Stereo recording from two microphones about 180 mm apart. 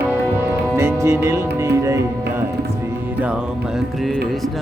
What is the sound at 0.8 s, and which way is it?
Music, 15° right (ahead or behind).